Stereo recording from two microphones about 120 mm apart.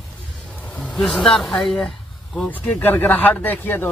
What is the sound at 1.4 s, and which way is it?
Speech, centre (ahead or behind).